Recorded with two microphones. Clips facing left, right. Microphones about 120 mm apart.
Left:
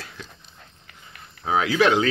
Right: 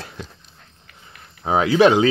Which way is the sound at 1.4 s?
30° right (ahead or behind).